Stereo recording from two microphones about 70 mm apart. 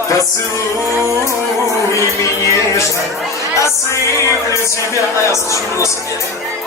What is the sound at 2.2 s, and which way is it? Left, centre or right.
Music, left.